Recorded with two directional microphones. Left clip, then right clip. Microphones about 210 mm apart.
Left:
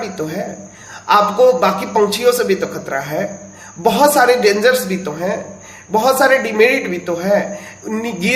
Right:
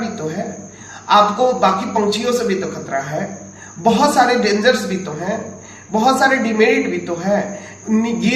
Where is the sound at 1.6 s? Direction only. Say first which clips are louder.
Left 1 dB; 50° left (ahead or behind).